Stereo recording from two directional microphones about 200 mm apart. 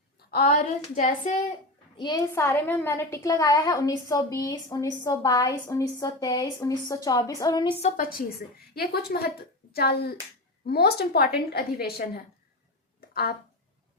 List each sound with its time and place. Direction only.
0.3 s speech: 50° left (ahead or behind)
2.0 s a woman's voice: 20° left (ahead or behind)
8.7 s a woman's voice: 50° left (ahead or behind)
13.0 s a sound: 50° left (ahead or behind)